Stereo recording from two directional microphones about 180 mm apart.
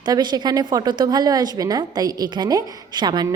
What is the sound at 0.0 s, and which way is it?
A woman's voice, 25° right (ahead or behind).